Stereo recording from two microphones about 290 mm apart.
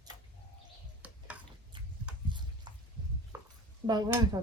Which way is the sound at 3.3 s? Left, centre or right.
Centre.